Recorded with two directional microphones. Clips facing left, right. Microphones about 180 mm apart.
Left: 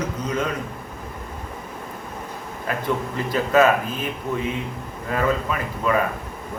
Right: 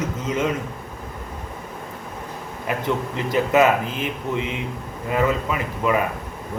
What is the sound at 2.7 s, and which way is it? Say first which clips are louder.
Speech: right 1 dB; 20° right (ahead or behind).